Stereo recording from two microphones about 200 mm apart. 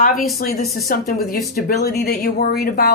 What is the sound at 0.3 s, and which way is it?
Speech, 50° left (ahead or behind).